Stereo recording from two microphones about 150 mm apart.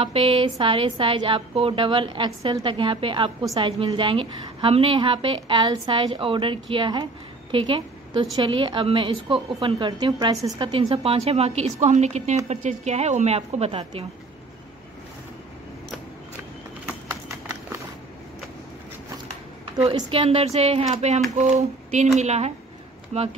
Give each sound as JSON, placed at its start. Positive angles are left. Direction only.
{"t": 0.0, "sound": "a woman's voice", "side_deg": -40}
{"t": 10.7, "sound": "a woman's voice", "side_deg": -40}
{"t": 19.9, "sound": "a woman's voice", "side_deg": -40}